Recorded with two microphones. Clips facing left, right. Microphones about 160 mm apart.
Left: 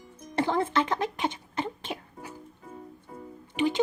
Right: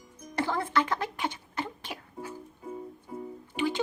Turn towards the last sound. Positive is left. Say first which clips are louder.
# left 3 dB
turn(degrees=20)  # may be behind; listen again after turning